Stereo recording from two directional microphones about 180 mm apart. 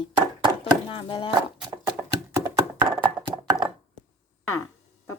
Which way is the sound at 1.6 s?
20° right (ahead or behind).